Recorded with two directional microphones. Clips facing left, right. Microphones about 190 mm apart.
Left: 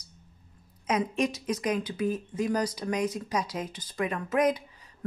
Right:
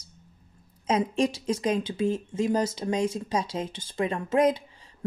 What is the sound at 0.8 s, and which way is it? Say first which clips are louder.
Speech: right 3 dB; 30° right (ahead or behind).